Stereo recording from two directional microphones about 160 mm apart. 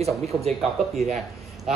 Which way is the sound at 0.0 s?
40° right (ahead or behind).